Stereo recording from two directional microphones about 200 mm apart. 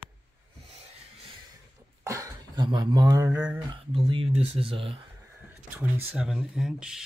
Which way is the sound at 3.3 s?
5° right (ahead or behind).